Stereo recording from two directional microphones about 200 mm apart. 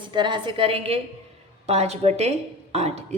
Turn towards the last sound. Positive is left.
turn(degrees=-30)  # may be behind; listen again after turning